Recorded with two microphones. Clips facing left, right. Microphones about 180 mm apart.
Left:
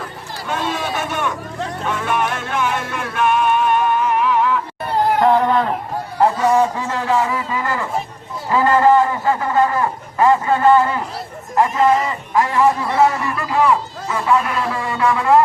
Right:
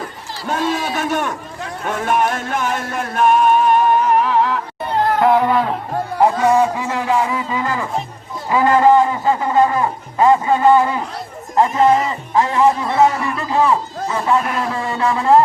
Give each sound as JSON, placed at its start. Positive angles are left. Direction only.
{"t": 0.9, "sound": "speech", "side_deg": -45}
{"t": 1.9, "sound": "music", "side_deg": -45}
{"t": 5.2, "sound": "a sound", "side_deg": -10}
{"t": 8.4, "sound": "a man's voice", "side_deg": -15}